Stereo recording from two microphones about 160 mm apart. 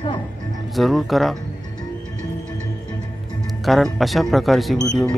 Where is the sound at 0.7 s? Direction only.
Centre (ahead or behind).